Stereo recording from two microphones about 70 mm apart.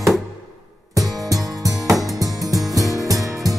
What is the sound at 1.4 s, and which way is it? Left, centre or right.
Music, right.